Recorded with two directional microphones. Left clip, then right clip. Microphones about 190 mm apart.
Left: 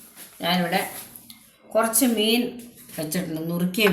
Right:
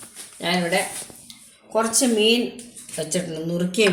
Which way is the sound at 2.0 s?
35° right (ahead or behind).